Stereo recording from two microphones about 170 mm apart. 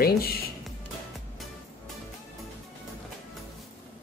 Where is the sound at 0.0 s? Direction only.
60° left (ahead or behind).